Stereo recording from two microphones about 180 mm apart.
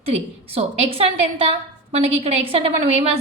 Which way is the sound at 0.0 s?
35° right (ahead or behind).